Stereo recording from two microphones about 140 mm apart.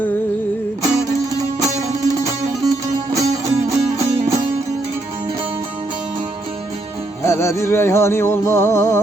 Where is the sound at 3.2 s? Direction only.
50° right (ahead or behind).